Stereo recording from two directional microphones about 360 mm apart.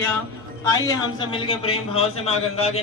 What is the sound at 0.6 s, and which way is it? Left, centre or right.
A man's voice, centre.